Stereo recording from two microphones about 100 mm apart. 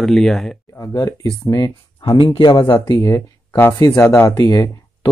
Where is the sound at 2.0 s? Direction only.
50° left (ahead or behind).